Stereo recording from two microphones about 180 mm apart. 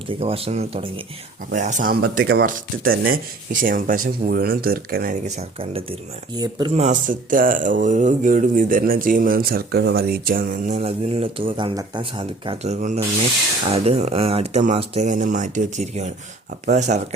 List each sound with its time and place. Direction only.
0.1 s speech: 30° right (ahead or behind)
1.5 s speech: 45° right (ahead or behind)
5.4 s speech: 30° right (ahead or behind)
6.7 s speech: 45° right (ahead or behind)